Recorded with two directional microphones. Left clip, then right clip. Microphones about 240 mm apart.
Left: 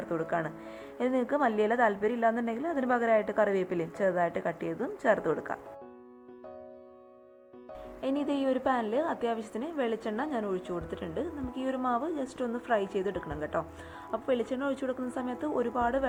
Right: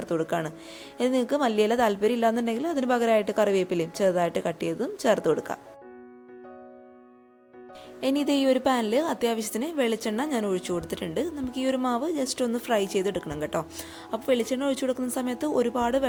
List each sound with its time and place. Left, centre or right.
0.0 s a woman's voice: right
8.0 s a woman's voice: right